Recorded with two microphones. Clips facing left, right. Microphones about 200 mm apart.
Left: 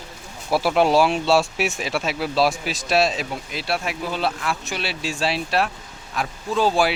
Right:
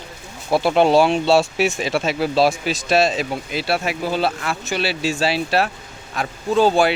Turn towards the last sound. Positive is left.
turn(degrees=-30)  # may be behind; listen again after turning